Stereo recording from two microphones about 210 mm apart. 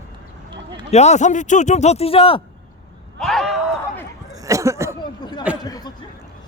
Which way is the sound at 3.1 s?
Centre (ahead or behind).